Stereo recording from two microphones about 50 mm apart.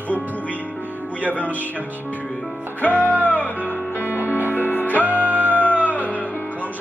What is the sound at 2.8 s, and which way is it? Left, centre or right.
Music, left.